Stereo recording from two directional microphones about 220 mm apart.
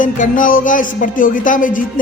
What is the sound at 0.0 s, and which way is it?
Speech, 35° left (ahead or behind).